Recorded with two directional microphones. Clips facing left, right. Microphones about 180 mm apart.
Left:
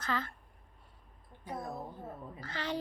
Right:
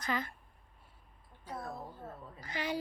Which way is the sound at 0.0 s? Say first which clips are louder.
Even; 15° right (ahead or behind).